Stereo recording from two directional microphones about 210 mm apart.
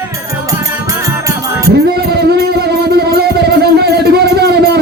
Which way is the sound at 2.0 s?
50° right (ahead or behind).